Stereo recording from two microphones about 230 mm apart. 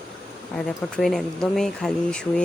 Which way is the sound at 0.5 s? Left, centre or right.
Centre.